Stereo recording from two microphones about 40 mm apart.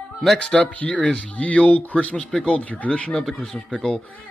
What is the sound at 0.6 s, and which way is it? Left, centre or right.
Speech, left.